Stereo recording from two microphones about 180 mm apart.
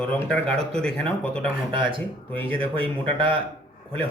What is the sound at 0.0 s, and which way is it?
Speech, 5° left (ahead or behind).